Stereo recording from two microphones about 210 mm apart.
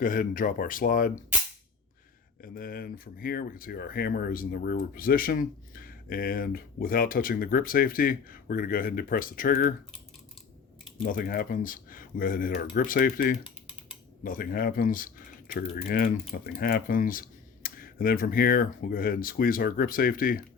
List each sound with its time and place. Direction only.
0.0 s speech: 40° left (ahead or behind)
2.4 s speech: 45° left (ahead or behind)
11.0 s speech: 45° left (ahead or behind)